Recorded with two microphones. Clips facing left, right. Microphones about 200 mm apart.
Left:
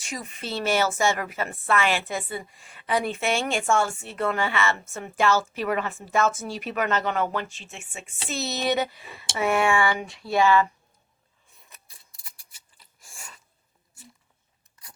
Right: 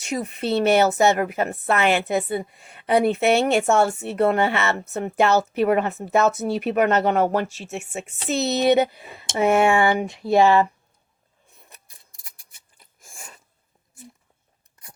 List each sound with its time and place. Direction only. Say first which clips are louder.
0.1 s speech: right 9 dB; 60° right (ahead or behind); by 8.0 s 45° right (ahead or behind)
8.0 s speech: right 7 dB; 60° right (ahead or behind); by 10.7 s 40° right (ahead or behind)
12.4 s a sound: right 2 dB; 55° right (ahead or behind)